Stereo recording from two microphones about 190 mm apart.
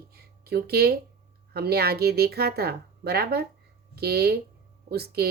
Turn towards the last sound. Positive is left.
turn(degrees=-55)  # may be behind; listen again after turning